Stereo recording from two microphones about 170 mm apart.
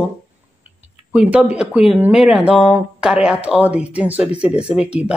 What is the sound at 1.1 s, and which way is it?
Speech, 10° right (ahead or behind).